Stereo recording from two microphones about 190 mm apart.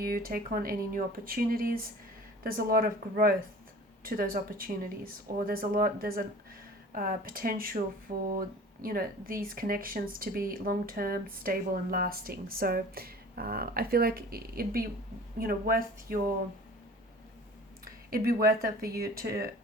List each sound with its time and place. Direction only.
0.0 s speech: 50° right (ahead or behind)
18.1 s speech: 50° right (ahead or behind)